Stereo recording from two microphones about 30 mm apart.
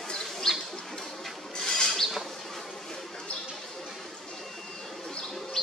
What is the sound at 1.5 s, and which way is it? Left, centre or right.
Rodents, centre.